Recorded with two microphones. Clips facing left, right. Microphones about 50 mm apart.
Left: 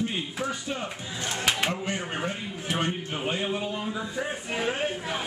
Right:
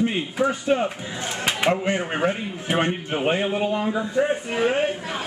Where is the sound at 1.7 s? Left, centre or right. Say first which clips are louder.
Right 8 dB; right.